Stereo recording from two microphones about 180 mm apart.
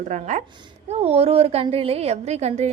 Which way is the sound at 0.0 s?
40° right (ahead or behind).